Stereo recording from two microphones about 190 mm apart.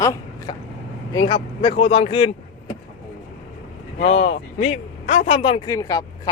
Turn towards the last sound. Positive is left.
turn(degrees=20)  # may be behind; listen again after turning